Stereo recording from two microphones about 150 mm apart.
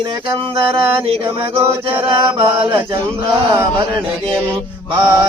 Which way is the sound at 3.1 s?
15° right (ahead or behind).